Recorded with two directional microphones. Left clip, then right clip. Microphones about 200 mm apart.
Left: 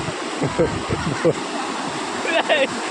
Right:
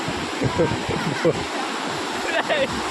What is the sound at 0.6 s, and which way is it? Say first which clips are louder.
Speech: left 2 dB; 10° left (ahead or behind).